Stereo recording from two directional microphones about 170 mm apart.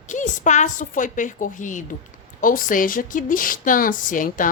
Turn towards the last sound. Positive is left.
turn(degrees=50)  # may be behind; listen again after turning